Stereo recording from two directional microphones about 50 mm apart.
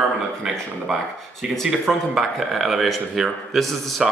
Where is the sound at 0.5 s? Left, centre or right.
Centre.